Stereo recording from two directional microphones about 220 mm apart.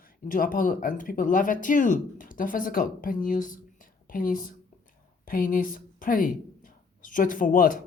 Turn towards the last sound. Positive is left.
turn(degrees=40)  # may be behind; listen again after turning